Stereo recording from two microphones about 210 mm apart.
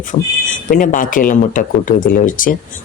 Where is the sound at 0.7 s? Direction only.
40° left (ahead or behind).